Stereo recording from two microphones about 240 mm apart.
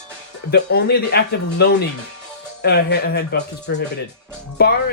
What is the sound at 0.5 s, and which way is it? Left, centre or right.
Speech, left.